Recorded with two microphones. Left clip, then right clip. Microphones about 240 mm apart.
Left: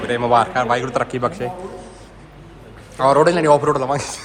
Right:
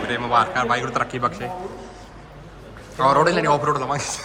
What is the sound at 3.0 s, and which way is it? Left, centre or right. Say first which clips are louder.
A man's voice: left 3 dB; centre.